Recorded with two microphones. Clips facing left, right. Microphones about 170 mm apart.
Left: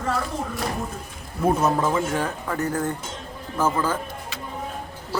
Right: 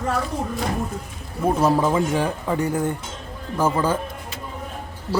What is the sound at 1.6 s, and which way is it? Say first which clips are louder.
Speech: right 3 dB; 15° right (ahead or behind).